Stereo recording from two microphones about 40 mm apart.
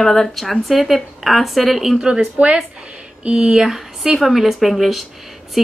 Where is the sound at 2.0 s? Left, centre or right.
Right.